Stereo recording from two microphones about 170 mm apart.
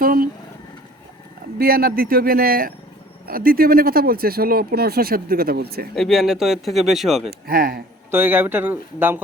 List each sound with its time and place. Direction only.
0.0 s a sound: 55° right (ahead or behind)
1.5 s speech: 60° right (ahead or behind)
5.9 s speech: centre (ahead or behind)
7.3 s speech: 60° right (ahead or behind)
8.1 s speech: 10° right (ahead or behind)